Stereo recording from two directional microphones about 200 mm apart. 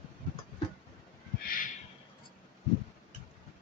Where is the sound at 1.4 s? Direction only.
45° left (ahead or behind).